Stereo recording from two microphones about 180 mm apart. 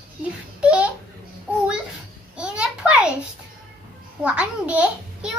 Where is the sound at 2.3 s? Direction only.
5° right (ahead or behind).